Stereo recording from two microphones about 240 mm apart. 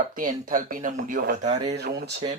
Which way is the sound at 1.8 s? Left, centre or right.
Right.